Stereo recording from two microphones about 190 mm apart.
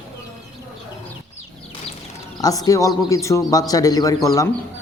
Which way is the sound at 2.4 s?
20° left (ahead or behind).